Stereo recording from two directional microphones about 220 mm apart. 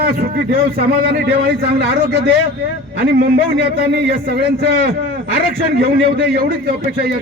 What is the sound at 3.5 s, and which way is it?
A man's voice, 50° right (ahead or behind).